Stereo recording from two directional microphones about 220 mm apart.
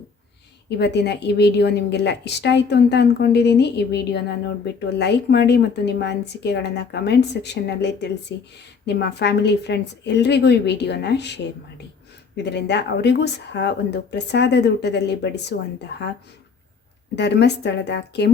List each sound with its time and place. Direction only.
0.8 s a woman's voice: 50° left (ahead or behind)
12.4 s a woman's voice: 50° left (ahead or behind)
17.2 s a woman's voice: 50° left (ahead or behind)